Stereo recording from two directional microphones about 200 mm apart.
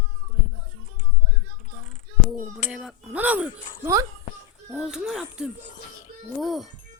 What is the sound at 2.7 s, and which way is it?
Speech, 5° right (ahead or behind).